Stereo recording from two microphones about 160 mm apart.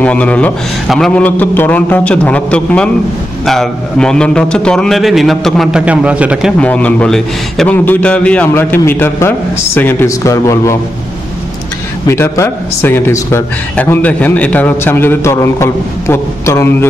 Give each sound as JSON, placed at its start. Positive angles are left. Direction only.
{"t": 0.0, "sound": "a man's voice", "side_deg": 10}
{"t": 6.6, "sound": "a man's voice", "side_deg": 10}
{"t": 12.1, "sound": "a man's voice", "side_deg": 15}